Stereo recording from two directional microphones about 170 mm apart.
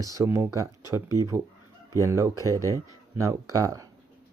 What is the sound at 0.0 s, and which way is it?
Speech, 20° right (ahead or behind).